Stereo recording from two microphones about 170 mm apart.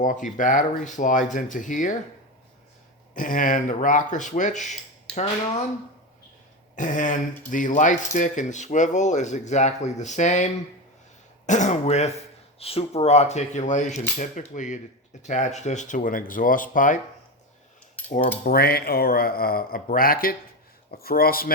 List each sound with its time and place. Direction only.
0.0 s speech: 50° left (ahead or behind)
3.2 s speech: 50° left (ahead or behind)
6.7 s speech: 50° left (ahead or behind)
18.0 s keys jangling: 10° left (ahead or behind)
18.4 s speech: 65° left (ahead or behind)